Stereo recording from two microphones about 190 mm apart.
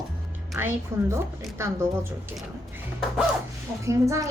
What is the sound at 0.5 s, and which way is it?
Music, 10° right (ahead or behind).